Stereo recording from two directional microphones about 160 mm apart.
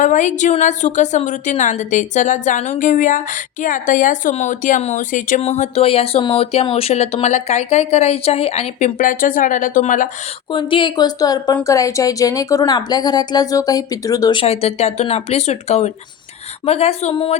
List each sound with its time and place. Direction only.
0.0 s a woman's voice: 50° left (ahead or behind)
10.5 s a woman's voice: 30° left (ahead or behind)
14.4 s speech: 40° left (ahead or behind)